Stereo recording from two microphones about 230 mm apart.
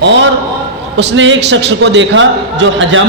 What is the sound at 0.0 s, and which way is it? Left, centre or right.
A man's voice, right.